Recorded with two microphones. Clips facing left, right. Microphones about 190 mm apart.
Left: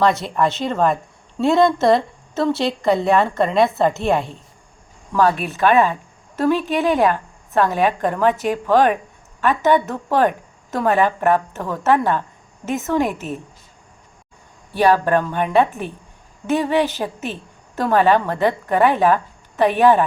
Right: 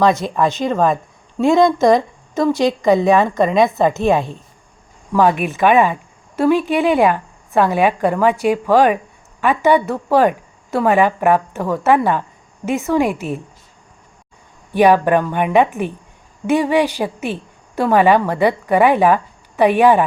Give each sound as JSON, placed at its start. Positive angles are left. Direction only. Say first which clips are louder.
{"t": 0.0, "sound": "a woman's voice", "louder": "right 2 dB", "side_deg": -15}
{"t": 14.7, "sound": "a woman's voice", "louder": "right 3 dB", "side_deg": -15}